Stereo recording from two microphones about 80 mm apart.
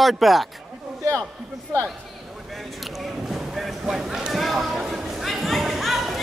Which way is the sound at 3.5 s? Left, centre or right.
Centre.